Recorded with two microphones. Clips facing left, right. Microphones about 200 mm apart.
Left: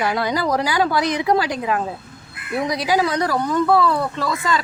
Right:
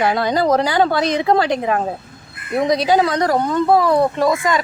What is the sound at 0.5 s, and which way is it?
Speech, 25° right (ahead or behind).